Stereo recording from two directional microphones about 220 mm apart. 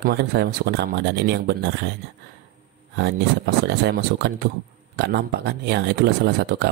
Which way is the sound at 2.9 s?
50° right (ahead or behind).